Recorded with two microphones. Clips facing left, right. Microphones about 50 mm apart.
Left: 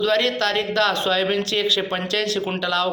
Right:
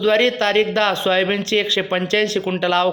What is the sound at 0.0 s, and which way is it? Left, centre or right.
Speech, right.